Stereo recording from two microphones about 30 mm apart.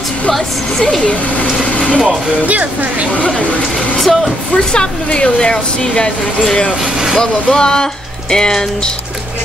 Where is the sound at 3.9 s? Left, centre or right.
Centre.